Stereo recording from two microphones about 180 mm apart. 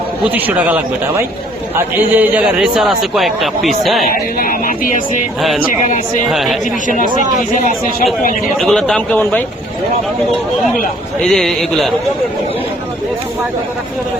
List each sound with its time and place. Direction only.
0.3 s a man's voice: 10° right (ahead or behind)
4.4 s speech: 50° left (ahead or behind)
6.3 s a man's voice: centre (ahead or behind)
6.8 s speech: 45° left (ahead or behind)
8.5 s a man's voice: centre (ahead or behind)
11.2 s a man's voice: centre (ahead or behind)